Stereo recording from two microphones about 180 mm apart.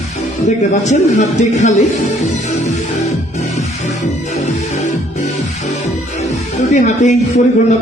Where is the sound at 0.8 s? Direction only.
40° left (ahead or behind).